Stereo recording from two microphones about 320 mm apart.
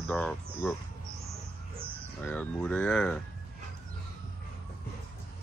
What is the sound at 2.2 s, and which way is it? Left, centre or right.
Speech, centre.